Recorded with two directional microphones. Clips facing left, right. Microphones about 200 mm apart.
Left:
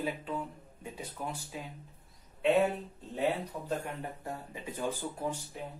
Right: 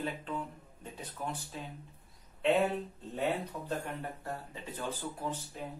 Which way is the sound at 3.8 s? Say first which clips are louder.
Left 1 dB; 15° left (ahead or behind).